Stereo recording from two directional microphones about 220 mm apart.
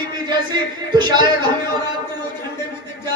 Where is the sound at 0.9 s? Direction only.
20° right (ahead or behind).